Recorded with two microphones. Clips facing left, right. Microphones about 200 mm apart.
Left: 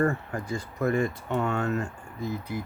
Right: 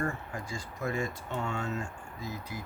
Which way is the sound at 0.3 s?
60° left (ahead or behind).